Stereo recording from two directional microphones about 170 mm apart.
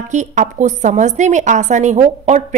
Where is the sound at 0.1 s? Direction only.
45° right (ahead or behind).